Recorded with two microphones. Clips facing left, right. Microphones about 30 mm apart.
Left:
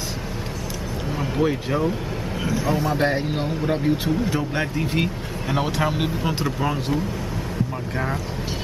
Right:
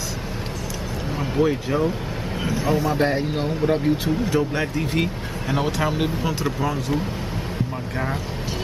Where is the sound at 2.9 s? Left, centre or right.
Centre.